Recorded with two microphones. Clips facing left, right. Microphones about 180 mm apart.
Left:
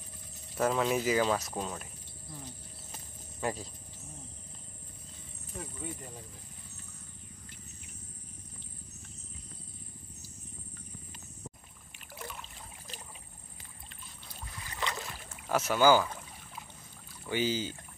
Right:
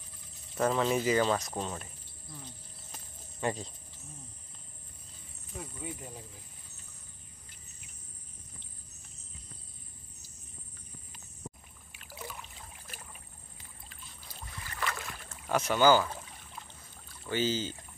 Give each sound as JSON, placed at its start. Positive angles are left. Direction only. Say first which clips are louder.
{"t": 0.6, "sound": "speech", "louder": "right 1 dB", "side_deg": 5}
{"t": 2.9, "sound": "a sound", "louder": "even", "side_deg": 5}
{"t": 5.6, "sound": "speech", "louder": "even", "side_deg": -5}
{"t": 12.2, "sound": "trickle", "louder": "even", "side_deg": -5}
{"t": 13.8, "sound": "boat", "louder": "even", "side_deg": -5}
{"t": 14.6, "sound": "boat", "louder": "even", "side_deg": 20}
{"t": 15.1, "sound": "rowboat", "louder": "even", "side_deg": 5}
{"t": 17.3, "sound": "speech", "louder": "even", "side_deg": 10}